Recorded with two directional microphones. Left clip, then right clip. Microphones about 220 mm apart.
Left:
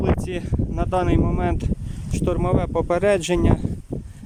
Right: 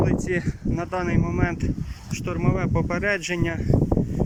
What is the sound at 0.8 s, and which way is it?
Speech, 15° left (ahead or behind).